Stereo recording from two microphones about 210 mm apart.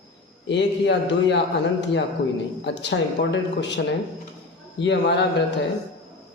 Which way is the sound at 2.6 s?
55° left (ahead or behind).